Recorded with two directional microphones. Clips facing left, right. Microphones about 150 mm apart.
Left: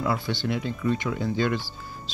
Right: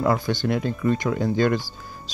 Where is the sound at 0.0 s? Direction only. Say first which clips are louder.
Right 5 dB; 45° right (ahead or behind).